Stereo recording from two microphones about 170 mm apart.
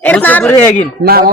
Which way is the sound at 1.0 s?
65° right (ahead or behind).